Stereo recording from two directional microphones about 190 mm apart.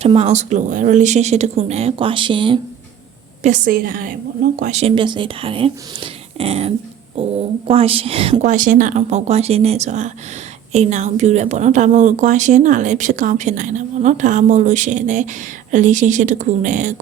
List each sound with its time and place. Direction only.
0.0 s speech: 35° right (ahead or behind)
3.4 s a woman's voice: 45° right (ahead or behind)